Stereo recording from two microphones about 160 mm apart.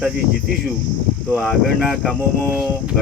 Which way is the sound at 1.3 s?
Centre (ahead or behind).